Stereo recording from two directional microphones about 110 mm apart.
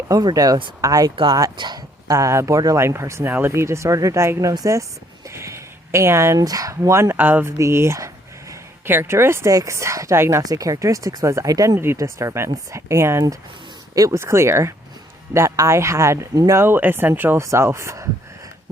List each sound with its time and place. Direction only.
0.1 s speech: 35° right (ahead or behind)
1.1 s speech: 45° right (ahead or behind)
2.0 s speech: 25° right (ahead or behind)